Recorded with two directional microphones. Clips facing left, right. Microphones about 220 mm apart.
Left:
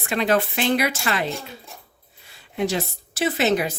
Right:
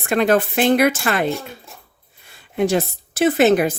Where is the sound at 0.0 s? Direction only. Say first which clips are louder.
Right 5 dB; 50° right (ahead or behind).